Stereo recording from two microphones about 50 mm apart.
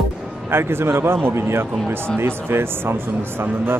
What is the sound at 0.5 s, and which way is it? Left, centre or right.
A man's voice, right.